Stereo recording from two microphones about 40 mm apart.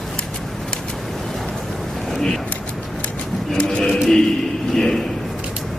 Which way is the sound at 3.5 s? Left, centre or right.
Left.